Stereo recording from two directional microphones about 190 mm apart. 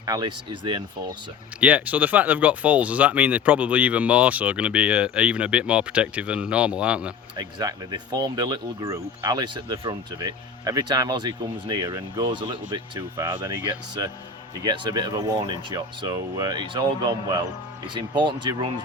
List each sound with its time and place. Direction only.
0.0 s speech: 20° right (ahead or behind)
1.6 s speech: 10° right (ahead or behind)
8.1 s speech: 20° right (ahead or behind)
13.2 s speech: 15° right (ahead or behind)